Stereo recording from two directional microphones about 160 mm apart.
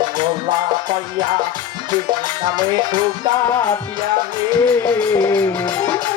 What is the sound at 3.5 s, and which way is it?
Music, 15° left (ahead or behind).